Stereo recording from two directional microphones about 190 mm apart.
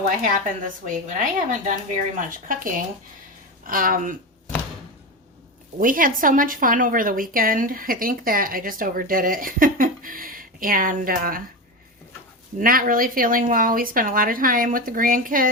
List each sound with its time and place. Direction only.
0.2 s a woman's voice: 45° right (ahead or behind)
5.8 s a woman's voice: 45° right (ahead or behind)
12.5 s a woman's voice: 50° right (ahead or behind)